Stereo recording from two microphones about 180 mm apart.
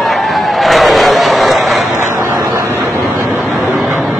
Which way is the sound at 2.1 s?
15° right (ahead or behind).